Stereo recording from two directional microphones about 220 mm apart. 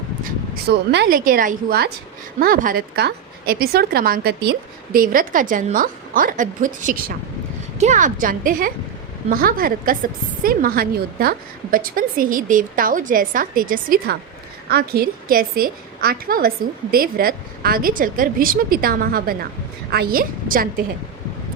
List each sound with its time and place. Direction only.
0.3 s a woman's voice: 50° right (ahead or behind)